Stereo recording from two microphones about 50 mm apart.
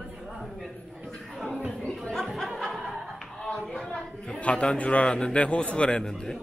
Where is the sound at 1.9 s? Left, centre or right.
Centre.